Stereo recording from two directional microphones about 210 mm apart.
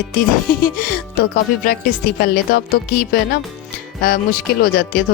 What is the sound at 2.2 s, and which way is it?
Speech, 45° left (ahead or behind).